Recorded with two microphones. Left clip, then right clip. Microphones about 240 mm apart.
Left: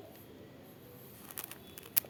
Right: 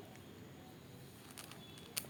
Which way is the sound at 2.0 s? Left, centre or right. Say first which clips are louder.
Left 5 dB; left.